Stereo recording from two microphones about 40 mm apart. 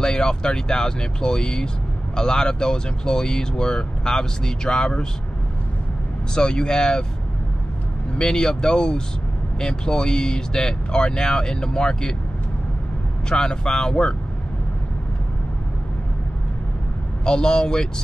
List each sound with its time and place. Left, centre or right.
0.0 s speech: centre
6.3 s speech: centre
8.2 s speech: centre
13.3 s speech: centre
17.2 s speech: left